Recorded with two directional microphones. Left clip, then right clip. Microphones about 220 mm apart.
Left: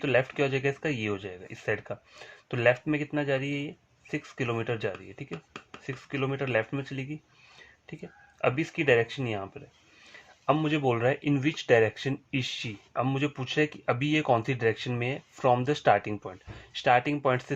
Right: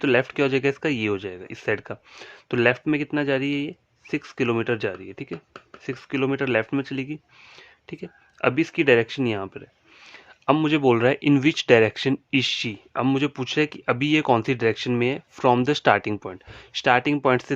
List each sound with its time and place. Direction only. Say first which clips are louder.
0.0 s speech: right 5 dB; 50° right (ahead or behind)
8.4 s speech: right 6 dB; 50° right (ahead or behind)